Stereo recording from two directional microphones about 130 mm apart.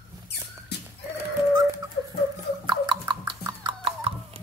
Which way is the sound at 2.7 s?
35° right (ahead or behind).